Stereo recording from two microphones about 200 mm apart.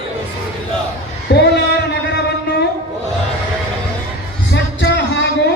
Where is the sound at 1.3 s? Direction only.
55° left (ahead or behind).